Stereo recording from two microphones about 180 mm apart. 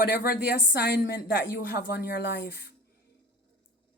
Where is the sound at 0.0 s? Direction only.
55° left (ahead or behind).